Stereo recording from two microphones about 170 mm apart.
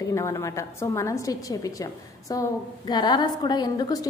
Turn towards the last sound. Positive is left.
turn(degrees=20)  # may be behind; listen again after turning